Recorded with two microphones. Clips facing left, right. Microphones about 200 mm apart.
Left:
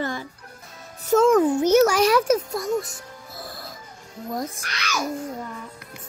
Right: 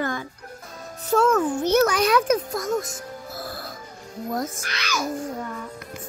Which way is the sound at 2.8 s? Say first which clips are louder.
Even; 40° right (ahead or behind).